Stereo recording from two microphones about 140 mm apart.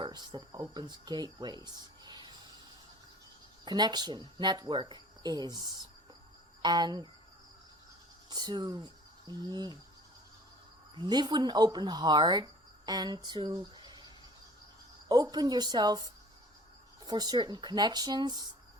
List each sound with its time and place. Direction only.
0.0 s speech: 30° right (ahead or behind)
3.7 s speech: 30° right (ahead or behind)
8.3 s speech: 30° right (ahead or behind)
10.9 s speech: 30° right (ahead or behind)
15.1 s speech: 30° right (ahead or behind)